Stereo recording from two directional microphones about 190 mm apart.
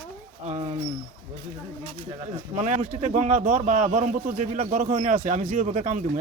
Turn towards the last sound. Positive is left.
turn(degrees=-40)  # may be behind; listen again after turning